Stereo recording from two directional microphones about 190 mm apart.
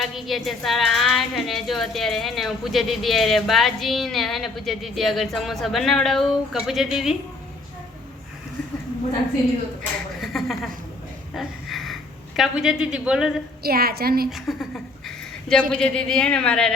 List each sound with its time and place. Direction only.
0.0 s a woman's voice: centre (ahead or behind)
10.2 s a sound: centre (ahead or behind)
11.3 s snort: centre (ahead or behind)
12.4 s a woman's voice: 5° right (ahead or behind)
13.6 s a woman's voice: 55° right (ahead or behind)
14.3 s a woman's voice: centre (ahead or behind)